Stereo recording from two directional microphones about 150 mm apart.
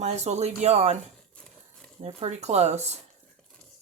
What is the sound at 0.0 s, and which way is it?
Speech, 50° right (ahead or behind).